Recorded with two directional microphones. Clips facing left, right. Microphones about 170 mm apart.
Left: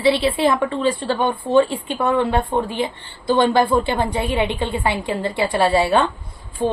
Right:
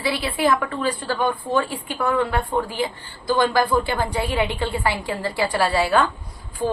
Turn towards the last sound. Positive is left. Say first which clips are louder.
# left 3 dB
turn(degrees=25)  # may be behind; listen again after turning